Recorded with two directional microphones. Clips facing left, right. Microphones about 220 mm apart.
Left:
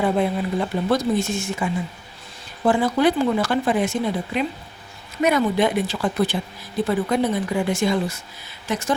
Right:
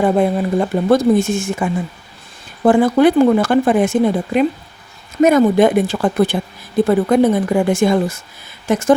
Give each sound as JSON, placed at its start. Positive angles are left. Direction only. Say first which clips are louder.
{"t": 0.0, "sound": "speech", "louder": "right 6 dB", "side_deg": -50}